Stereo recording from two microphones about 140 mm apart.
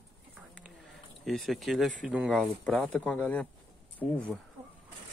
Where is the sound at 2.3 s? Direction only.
5° left (ahead or behind).